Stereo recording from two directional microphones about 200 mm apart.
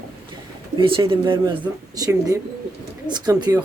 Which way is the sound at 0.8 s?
25° right (ahead or behind).